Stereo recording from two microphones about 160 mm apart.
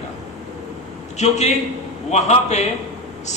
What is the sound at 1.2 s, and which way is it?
A man's voice, 45° left (ahead or behind).